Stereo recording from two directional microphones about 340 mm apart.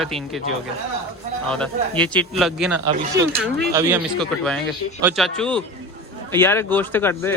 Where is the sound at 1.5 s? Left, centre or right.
Centre.